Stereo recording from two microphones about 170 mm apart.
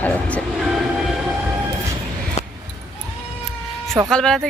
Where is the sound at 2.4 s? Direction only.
45° left (ahead or behind).